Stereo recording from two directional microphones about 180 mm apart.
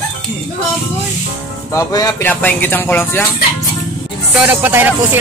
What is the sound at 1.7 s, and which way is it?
Turkey, 20° left (ahead or behind).